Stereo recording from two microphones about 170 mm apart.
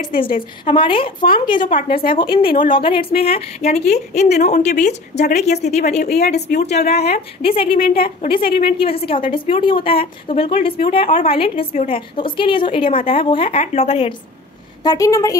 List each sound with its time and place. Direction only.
0.7 s a woman's voice: 30° left (ahead or behind)
1.7 s a woman's voice: 55° left (ahead or behind)
2.7 s a woman's voice: 30° left (ahead or behind)
6.0 s speech: 70° left (ahead or behind)
6.9 s a woman's voice: 40° left (ahead or behind)
7.6 s a woman's voice: 60° left (ahead or behind)
8.7 s a woman's voice: 35° left (ahead or behind)
14.8 s a woman's voice: 20° left (ahead or behind)